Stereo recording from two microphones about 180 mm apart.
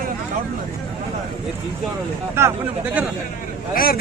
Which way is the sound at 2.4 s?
15° right (ahead or behind).